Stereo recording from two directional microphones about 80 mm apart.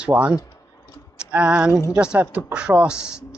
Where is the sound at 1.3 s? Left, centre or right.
Centre.